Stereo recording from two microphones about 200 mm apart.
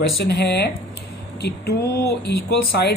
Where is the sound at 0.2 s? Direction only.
55° left (ahead or behind).